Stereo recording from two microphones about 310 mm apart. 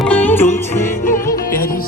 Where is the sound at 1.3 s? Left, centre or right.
Left.